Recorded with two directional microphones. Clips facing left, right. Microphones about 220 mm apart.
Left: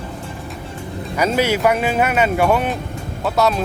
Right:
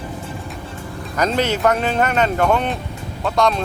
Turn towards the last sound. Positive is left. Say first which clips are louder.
# left 1 dB
turn(degrees=5)  # may be behind; listen again after turning